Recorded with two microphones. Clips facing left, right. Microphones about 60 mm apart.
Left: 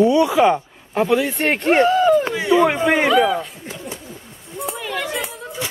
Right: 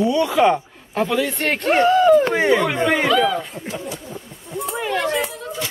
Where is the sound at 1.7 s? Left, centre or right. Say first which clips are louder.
Right 2 dB; centre.